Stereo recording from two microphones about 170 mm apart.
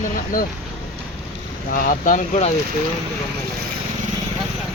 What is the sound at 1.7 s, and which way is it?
Speech, 50° left (ahead or behind).